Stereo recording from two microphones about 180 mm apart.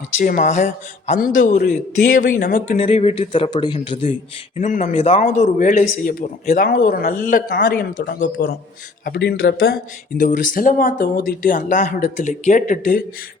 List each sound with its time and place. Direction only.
0.2 s speech: 50° left (ahead or behind)
2.6 s speech: 35° left (ahead or behind)
4.5 s speech: 45° left (ahead or behind)
5.2 s speech: 45° left (ahead or behind)
6.7 s speech: 50° left (ahead or behind)
10.2 s speech: 45° left (ahead or behind)